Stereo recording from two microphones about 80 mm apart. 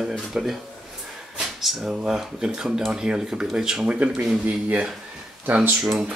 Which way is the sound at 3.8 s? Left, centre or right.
Centre.